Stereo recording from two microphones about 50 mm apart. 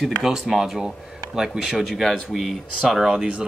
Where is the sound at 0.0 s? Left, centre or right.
Centre.